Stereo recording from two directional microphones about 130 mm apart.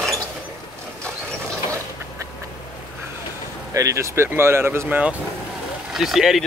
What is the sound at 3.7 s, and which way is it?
Speech, 25° right (ahead or behind).